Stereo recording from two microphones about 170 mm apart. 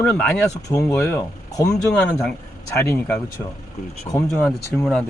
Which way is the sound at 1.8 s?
5° left (ahead or behind).